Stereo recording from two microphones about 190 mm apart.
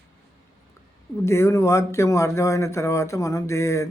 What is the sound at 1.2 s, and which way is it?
Speech, 15° left (ahead or behind).